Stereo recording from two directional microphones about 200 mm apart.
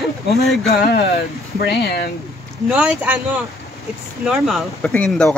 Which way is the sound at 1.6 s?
55° left (ahead or behind).